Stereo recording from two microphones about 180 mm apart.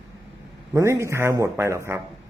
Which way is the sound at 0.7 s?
15° right (ahead or behind).